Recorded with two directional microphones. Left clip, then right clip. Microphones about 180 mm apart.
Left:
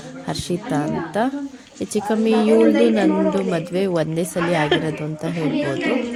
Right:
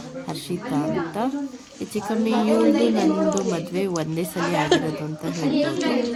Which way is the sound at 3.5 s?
25° left (ahead or behind).